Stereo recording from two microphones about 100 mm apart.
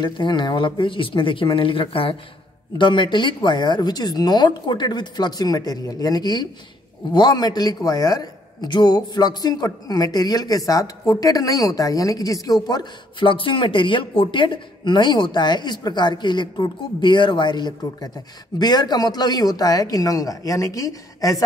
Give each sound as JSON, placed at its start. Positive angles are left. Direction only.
{"t": 0.0, "sound": "speech", "side_deg": 50}
{"t": 2.8, "sound": "a woman's voice", "side_deg": 50}
{"t": 13.2, "sound": "a woman's voice", "side_deg": 60}